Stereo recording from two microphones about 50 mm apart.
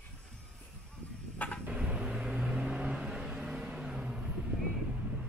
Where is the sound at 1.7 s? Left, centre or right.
Right.